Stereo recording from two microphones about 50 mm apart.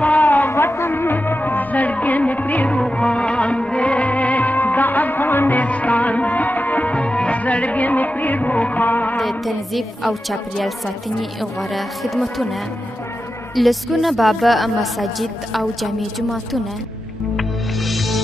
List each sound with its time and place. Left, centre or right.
0.0 s a sound: left
0.5 s music of bollywood: left
2.8 s music: centre; by 5.6 s left
5.6 s music of bollywood: left
9.2 s a woman's voice: centre
13.6 s a woman's voice: centre
17.4 s music: centre